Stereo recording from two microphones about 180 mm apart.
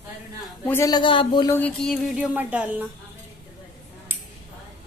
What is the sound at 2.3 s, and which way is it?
Speech, 10° right (ahead or behind).